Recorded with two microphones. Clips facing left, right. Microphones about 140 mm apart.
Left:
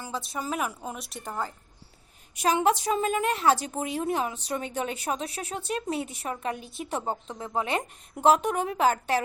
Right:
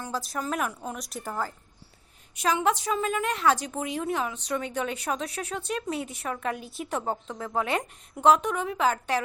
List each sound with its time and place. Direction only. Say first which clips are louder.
0.0 s a woman's voice: right 2 dB; centre (ahead or behind)
2.4 s a woman's voice: left 2 dB; 35° left (ahead or behind)
8.4 s a woman's voice: left 2 dB; 45° left (ahead or behind)